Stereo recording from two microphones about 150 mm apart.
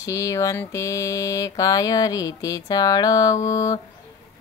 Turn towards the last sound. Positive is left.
turn(degrees=20)  # may be behind; listen again after turning